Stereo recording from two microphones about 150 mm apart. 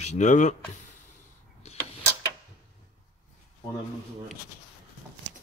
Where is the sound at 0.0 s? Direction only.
50° left (ahead or behind).